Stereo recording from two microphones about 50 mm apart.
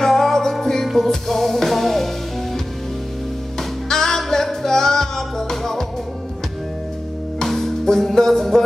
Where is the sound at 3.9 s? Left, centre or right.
Centre.